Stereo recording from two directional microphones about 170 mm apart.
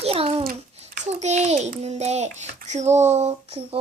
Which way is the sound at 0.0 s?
35° right (ahead or behind).